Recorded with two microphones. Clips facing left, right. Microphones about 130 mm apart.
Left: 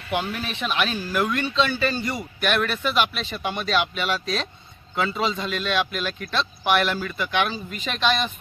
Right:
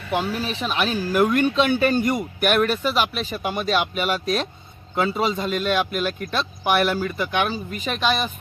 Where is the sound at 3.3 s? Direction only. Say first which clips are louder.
Right 1 dB; 10° right (ahead or behind).